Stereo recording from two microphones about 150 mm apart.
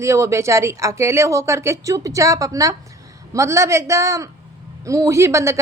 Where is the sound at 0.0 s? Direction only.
20° right (ahead or behind).